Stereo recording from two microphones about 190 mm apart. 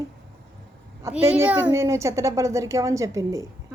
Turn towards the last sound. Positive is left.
turn(degrees=-15)  # may be behind; listen again after turning